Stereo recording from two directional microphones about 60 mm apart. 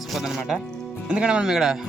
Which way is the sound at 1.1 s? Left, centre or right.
Centre.